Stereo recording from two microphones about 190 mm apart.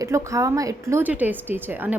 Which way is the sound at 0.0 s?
15° right (ahead or behind).